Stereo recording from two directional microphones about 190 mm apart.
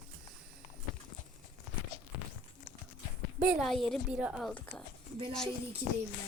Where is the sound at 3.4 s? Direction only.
5° right (ahead or behind).